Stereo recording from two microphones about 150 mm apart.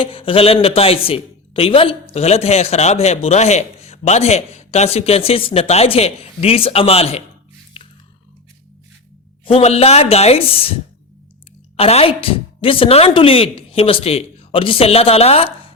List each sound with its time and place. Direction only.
0.0 s a woman's voice: 40° left (ahead or behind)
9.4 s speech: 40° left (ahead or behind)
11.8 s a woman's voice: 40° left (ahead or behind)